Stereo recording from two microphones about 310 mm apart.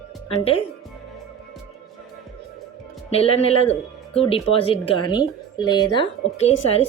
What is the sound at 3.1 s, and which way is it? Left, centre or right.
Speech, centre.